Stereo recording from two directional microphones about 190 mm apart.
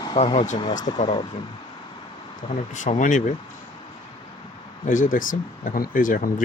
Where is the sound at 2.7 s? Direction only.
40° left (ahead or behind).